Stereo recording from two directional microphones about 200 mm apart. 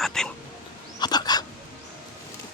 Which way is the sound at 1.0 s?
20° left (ahead or behind).